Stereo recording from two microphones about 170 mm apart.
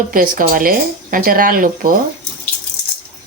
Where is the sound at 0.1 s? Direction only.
55° right (ahead or behind).